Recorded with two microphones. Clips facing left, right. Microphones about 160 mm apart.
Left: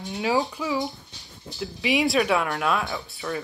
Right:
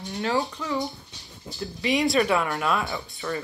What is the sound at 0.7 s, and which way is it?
Speech, centre (ahead or behind).